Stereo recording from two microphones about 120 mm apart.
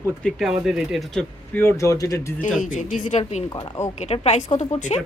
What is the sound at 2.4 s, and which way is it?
A woman's voice, 90° left.